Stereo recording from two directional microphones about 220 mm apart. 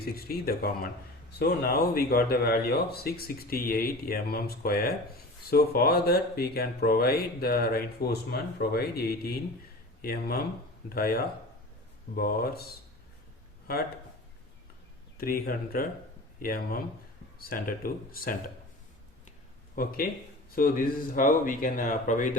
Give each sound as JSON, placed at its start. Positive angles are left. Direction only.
{"t": 0.0, "sound": "speech", "side_deg": 45}
{"t": 15.2, "sound": "speech", "side_deg": 40}
{"t": 19.7, "sound": "speech", "side_deg": 40}